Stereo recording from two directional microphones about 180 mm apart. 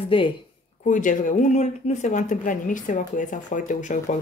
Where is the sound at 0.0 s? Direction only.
30° left (ahead or behind).